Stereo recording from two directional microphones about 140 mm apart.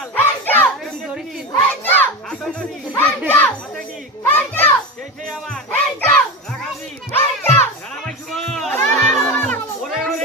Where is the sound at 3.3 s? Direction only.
10° left (ahead or behind).